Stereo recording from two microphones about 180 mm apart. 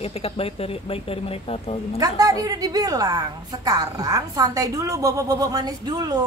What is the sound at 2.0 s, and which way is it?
A woman's voice, 20° right (ahead or behind).